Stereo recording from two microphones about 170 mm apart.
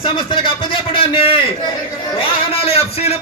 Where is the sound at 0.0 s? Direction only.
30° left (ahead or behind).